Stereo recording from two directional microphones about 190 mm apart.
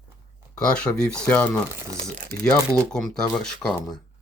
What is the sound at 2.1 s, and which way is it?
Speech, 45° right (ahead or behind).